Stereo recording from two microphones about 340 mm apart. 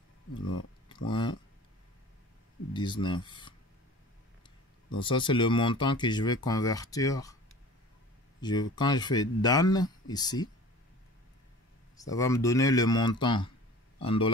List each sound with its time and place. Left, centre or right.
0.8 s a sound: centre
2.7 s speech: centre
4.9 s speech: centre
8.4 s speech: centre
12.0 s a man's voice: centre